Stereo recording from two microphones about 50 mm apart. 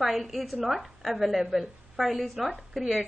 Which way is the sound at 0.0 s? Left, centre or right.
Centre.